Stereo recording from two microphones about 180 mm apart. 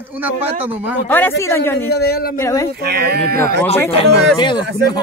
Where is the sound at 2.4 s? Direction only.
20° left (ahead or behind).